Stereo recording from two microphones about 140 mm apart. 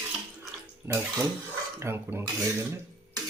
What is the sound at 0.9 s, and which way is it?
Speech, 15° right (ahead or behind).